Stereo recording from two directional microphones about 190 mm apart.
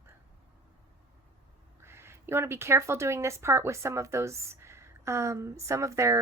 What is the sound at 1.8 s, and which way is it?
Speech, 15° right (ahead or behind).